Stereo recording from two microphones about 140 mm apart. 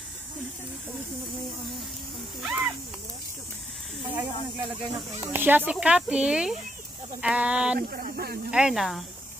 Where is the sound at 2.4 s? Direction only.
5° right (ahead or behind).